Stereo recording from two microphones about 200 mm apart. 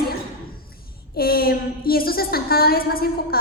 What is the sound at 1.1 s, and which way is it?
A woman's voice, 50° left (ahead or behind).